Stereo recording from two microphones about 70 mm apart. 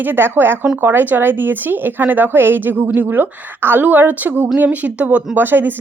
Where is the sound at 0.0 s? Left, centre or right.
Right.